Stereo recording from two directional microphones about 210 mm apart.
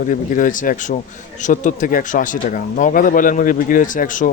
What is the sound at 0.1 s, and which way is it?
Speech, 40° left (ahead or behind).